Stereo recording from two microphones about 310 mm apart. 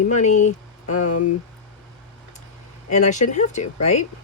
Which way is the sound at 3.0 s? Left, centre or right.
Left.